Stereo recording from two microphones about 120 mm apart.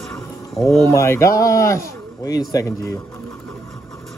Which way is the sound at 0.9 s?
25° left (ahead or behind).